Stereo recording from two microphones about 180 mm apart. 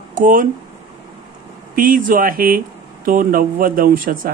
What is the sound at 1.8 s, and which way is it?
Speech, 50° right (ahead or behind).